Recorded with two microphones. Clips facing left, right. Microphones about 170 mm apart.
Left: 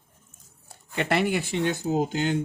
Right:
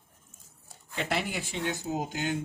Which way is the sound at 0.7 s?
65° left (ahead or behind).